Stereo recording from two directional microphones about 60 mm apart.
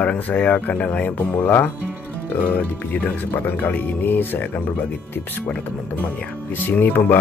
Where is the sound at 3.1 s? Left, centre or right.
Left.